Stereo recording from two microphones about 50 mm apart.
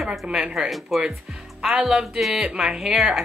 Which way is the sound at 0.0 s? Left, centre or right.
Centre.